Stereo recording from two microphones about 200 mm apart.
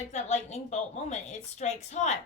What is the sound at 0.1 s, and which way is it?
A woman's voice, 35° left (ahead or behind).